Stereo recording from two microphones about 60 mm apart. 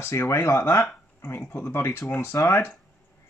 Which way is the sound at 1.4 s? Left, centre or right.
Left.